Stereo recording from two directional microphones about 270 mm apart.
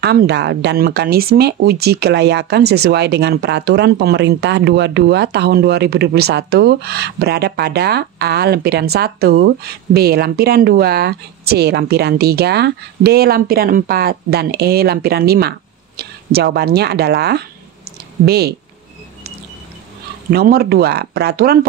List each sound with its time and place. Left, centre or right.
0.0 s speech: right
20.2 s speech: right